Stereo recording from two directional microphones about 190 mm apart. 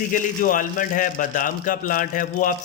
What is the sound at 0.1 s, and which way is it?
Speech, 45° left (ahead or behind).